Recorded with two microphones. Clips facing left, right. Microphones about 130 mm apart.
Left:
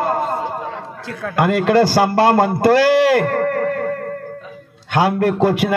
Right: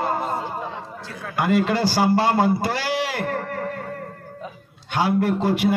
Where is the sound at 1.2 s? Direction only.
60° left (ahead or behind).